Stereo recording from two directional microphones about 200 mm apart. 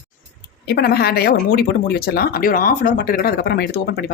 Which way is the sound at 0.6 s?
50° left (ahead or behind).